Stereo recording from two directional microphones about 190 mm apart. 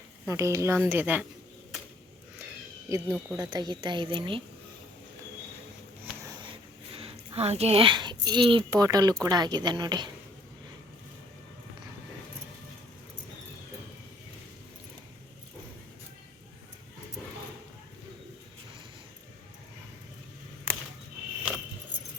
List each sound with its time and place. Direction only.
0.3 s speech: 15° right (ahead or behind)
2.9 s speech: 15° right (ahead or behind)
6.9 s speech: 30° right (ahead or behind)